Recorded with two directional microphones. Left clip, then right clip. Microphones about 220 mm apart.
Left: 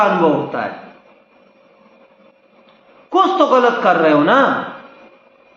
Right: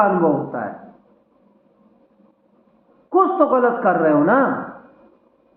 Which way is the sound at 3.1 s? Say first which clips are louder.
Left 3 dB; 25° left (ahead or behind).